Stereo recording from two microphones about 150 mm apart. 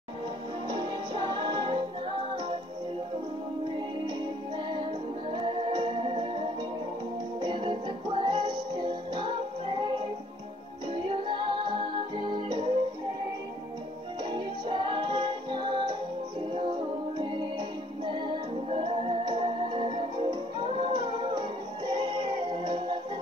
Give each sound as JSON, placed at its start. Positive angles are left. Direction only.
{"t": 0.7, "sound": "music", "side_deg": -35}
{"t": 5.3, "sound": "music", "side_deg": -35}
{"t": 14.3, "sound": "music", "side_deg": -30}
{"t": 17.2, "sound": "music", "side_deg": -30}